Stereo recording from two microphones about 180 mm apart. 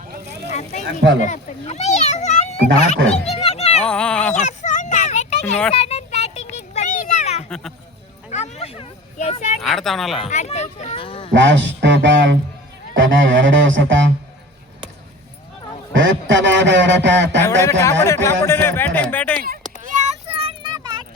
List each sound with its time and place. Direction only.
0.5 s vehicle: 40° left (ahead or behind)
1.2 s a child's voice: 45° left (ahead or behind)
3.2 s a sound: 35° left (ahead or behind)
3.8 s speech: 5° left (ahead or behind)
4.4 s a sound: 40° left (ahead or behind)
9.6 s speech: centre (ahead or behind)
10.2 s a child's voice: 40° left (ahead or behind)
11.3 s a man's voice: 90° right
15.9 s a man's voice: 90° right
17.6 s speech: 15° left (ahead or behind)
18.0 s a sound: 15° left (ahead or behind)
19.5 s a sound: 45° right (ahead or behind); by 21.0 s 25° right (ahead or behind)